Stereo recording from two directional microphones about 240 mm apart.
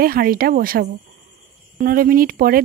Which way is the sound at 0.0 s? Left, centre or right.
Right.